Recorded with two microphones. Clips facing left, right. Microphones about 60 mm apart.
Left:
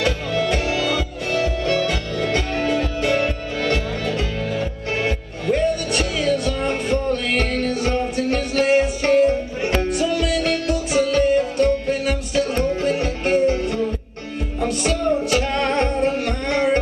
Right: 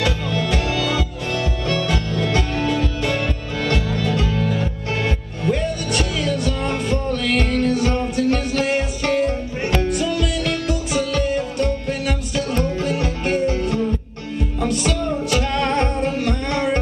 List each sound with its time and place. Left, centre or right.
0.5 s music: centre